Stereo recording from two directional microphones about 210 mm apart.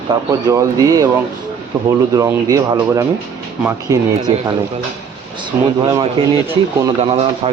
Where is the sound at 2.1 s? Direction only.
15° right (ahead or behind).